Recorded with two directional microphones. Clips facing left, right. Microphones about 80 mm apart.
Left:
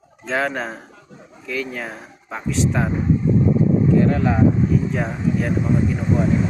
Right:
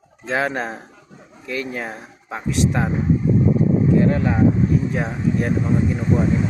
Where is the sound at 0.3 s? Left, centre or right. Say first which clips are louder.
Right 1 dB; centre.